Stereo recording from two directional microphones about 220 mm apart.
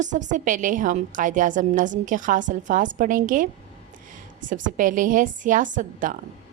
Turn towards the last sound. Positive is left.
turn(degrees=-35)  # may be behind; listen again after turning